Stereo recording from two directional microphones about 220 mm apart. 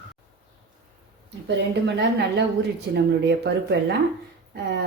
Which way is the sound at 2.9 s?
50° right (ahead or behind).